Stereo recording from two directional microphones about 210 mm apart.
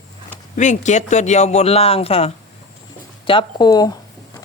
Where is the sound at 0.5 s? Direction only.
35° left (ahead or behind); by 3.9 s 15° left (ahead or behind).